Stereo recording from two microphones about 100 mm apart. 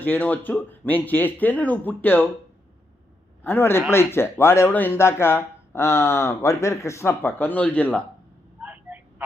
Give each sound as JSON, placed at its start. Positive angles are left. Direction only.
{"t": 0.0, "sound": "speech", "side_deg": 15}
{"t": 3.4, "sound": "speech", "side_deg": 25}
{"t": 8.6, "sound": "a sound", "side_deg": -15}